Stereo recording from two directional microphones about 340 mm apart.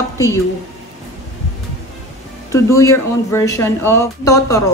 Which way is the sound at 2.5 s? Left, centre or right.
Centre.